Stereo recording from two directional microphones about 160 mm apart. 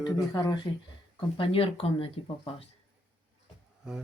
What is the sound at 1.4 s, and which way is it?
Speech, 35° left (ahead or behind).